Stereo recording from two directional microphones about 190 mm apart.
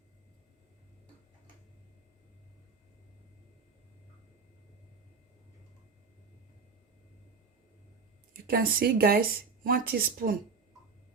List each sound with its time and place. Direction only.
8.4 s speech: 50° right (ahead or behind)